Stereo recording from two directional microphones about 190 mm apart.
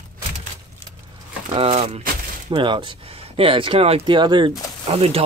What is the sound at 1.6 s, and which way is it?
Speech, 30° right (ahead or behind).